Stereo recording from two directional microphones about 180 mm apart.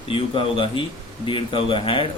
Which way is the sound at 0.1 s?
30° left (ahead or behind).